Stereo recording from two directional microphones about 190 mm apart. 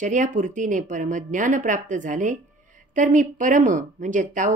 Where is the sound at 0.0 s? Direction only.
40° right (ahead or behind).